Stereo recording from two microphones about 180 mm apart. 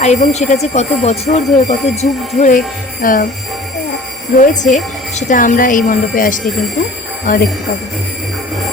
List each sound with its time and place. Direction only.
0.0 s speech: 40° left (ahead or behind)
4.4 s a woman's voice: 45° left (ahead or behind)